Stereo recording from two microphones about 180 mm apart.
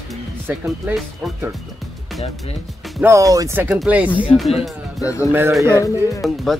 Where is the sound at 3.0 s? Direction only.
15° right (ahead or behind).